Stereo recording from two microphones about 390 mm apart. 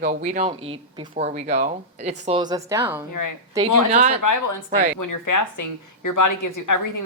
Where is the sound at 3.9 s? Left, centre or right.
Centre.